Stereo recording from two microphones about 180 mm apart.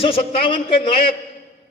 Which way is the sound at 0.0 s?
30° left (ahead or behind).